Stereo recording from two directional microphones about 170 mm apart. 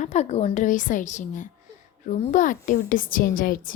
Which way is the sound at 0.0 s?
40° left (ahead or behind).